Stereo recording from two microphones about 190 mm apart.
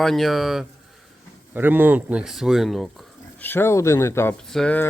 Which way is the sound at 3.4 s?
10° left (ahead or behind).